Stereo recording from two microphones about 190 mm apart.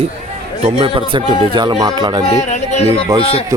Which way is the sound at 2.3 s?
35° left (ahead or behind).